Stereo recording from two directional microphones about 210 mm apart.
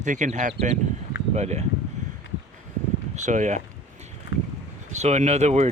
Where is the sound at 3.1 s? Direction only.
35° right (ahead or behind).